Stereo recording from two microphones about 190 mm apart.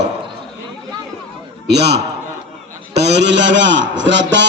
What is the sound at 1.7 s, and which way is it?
A man's voice, 60° right (ahead or behind).